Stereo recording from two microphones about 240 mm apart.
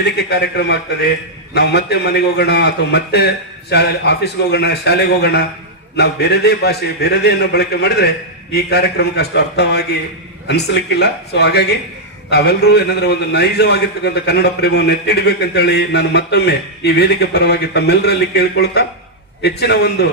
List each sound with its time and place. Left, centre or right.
0.0 s a man's voice: left